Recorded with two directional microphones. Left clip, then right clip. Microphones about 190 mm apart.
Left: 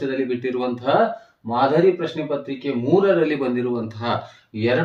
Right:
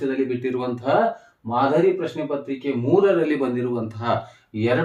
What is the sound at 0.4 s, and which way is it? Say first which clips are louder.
Speech: left 2 dB; 10° right (ahead or behind).